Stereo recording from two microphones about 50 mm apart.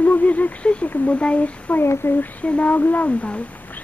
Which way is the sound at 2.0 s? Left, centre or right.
Left.